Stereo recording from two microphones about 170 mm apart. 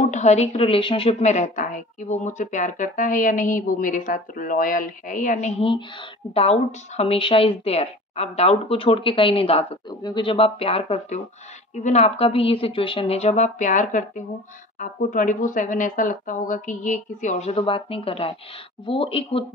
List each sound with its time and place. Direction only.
0.1 s a woman's voice: 45° left (ahead or behind)